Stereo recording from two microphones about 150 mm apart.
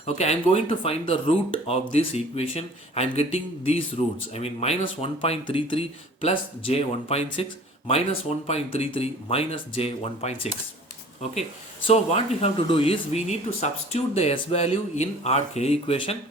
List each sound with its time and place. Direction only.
0.0 s speech: 45° left (ahead or behind)
8.4 s speech: 45° left (ahead or behind)
11.9 s speech: 45° left (ahead or behind)